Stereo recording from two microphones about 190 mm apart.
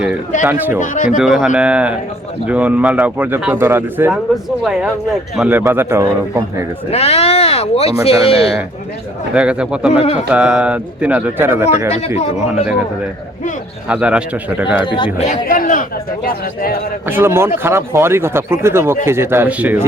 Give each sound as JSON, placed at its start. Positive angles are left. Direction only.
{"t": 0.4, "sound": "speech", "side_deg": -10}
{"t": 0.8, "sound": "speech", "side_deg": 45}
{"t": 1.2, "sound": "speech", "side_deg": 0}
{"t": 5.4, "sound": "speech", "side_deg": -10}
{"t": 6.9, "sound": "speech", "side_deg": 35}
{"t": 9.3, "sound": "speech", "side_deg": -5}
{"t": 11.9, "sound": "speech", "side_deg": 35}
{"t": 13.8, "sound": "speech", "side_deg": -5}
{"t": 14.8, "sound": "speech", "side_deg": 25}
{"t": 15.4, "sound": "speech", "side_deg": 45}
{"t": 17.1, "sound": "speech", "side_deg": -10}